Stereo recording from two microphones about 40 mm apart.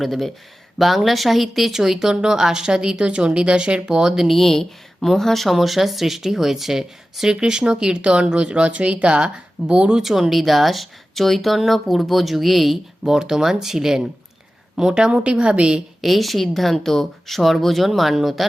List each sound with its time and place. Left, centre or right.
0.0 s speech: centre
4.3 s speech: centre; by 10.0 s right
10.0 s speech: centre
15.1 s a woman's voice: right
16.0 s speech: centre